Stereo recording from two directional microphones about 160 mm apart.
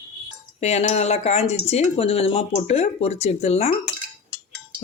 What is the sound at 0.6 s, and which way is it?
Speech, 40° left (ahead or behind).